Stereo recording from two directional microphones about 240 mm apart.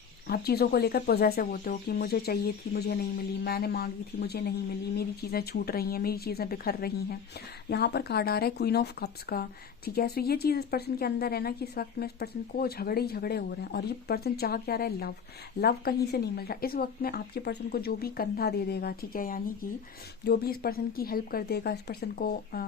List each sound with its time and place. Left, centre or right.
0.3 s speech: left